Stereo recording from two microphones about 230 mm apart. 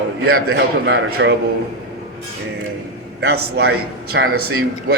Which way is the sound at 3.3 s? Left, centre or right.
Right.